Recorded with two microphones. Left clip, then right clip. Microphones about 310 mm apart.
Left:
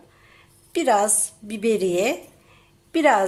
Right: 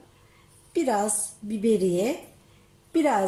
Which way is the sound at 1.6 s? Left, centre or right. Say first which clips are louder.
Left 3 dB; left.